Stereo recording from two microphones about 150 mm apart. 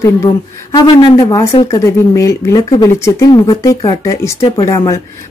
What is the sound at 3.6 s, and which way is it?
Speech, 20° left (ahead or behind).